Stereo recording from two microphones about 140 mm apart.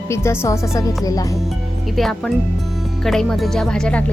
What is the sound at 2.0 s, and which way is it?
Speech, 5° left (ahead or behind).